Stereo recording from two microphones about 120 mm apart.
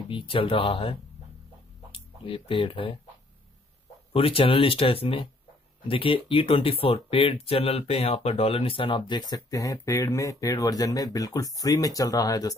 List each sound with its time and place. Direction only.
0.1 s speech: 45° left (ahead or behind)
4.1 s speech: 50° left (ahead or behind); by 12.5 s 30° left (ahead or behind)